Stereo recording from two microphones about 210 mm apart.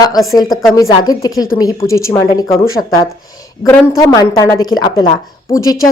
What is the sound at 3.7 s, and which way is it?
A woman's voice, 15° left (ahead or behind).